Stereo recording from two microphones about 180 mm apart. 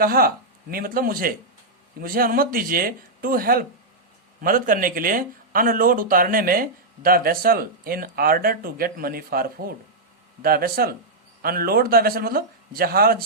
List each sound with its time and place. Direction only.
0.0 s a man's voice: 55° right (ahead or behind)